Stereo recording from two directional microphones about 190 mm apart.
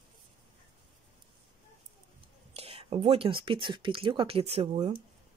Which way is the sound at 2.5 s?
30° right (ahead or behind).